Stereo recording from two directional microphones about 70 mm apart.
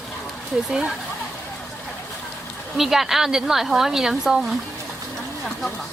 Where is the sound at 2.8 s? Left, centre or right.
Centre.